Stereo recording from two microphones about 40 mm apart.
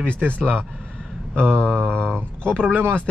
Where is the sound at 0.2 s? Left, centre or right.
Right.